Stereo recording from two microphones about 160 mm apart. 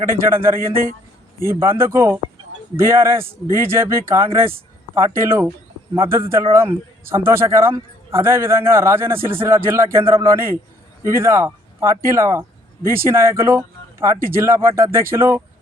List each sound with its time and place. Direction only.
0.0 s a man's voice: 15° right (ahead or behind)
0.7 s a man's voice: 60° right (ahead or behind)
1.5 s a man's voice: 15° right (ahead or behind)